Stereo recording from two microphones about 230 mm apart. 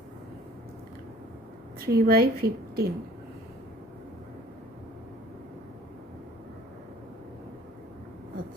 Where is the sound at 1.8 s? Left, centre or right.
Right.